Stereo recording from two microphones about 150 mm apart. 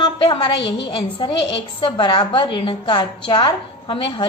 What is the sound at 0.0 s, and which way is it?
A woman's voice, 30° left (ahead or behind).